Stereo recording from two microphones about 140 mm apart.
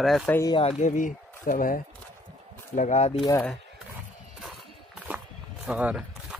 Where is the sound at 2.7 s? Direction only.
55° left (ahead or behind).